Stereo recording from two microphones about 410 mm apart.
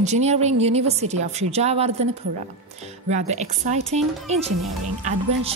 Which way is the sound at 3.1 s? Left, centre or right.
Centre.